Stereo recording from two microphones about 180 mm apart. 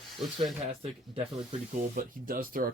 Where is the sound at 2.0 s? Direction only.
50° right (ahead or behind).